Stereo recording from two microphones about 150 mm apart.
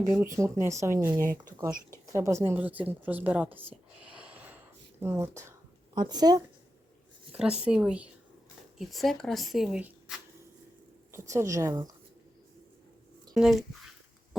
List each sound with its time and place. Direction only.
0.1 s a woman's voice: 15° right (ahead or behind)
4.1 s a sound: 10° right (ahead or behind)
5.9 s speech: 30° right (ahead or behind)
7.6 s a woman's voice: 5° right (ahead or behind)
11.1 s speech: 15° right (ahead or behind)
13.3 s speech: centre (ahead or behind)